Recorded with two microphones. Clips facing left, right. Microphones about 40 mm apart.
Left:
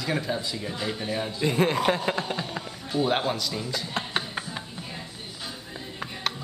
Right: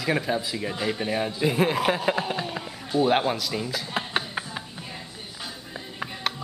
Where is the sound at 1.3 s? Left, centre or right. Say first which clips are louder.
Left 1 dB; centre.